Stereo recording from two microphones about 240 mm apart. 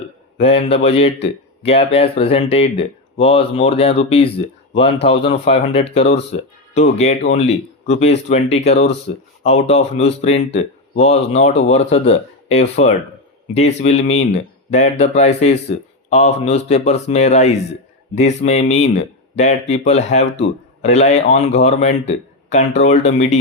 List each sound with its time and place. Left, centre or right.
0.3 s a man's voice: left